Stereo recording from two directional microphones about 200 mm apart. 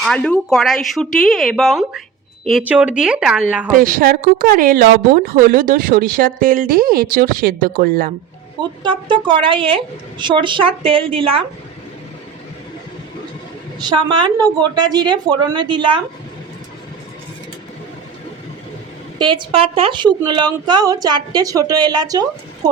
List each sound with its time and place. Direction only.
0.0 s speech: 5° left (ahead or behind)
3.7 s a woman's voice: 45° right (ahead or behind)
8.8 s a woman's voice: 25° right (ahead or behind)
13.7 s a woman's voice: 20° right (ahead or behind)
19.2 s a woman's voice: 25° right (ahead or behind)